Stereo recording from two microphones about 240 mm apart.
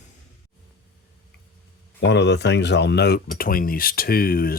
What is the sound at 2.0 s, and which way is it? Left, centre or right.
Speech, left.